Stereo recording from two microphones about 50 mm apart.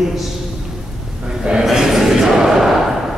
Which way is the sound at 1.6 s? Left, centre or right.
Centre.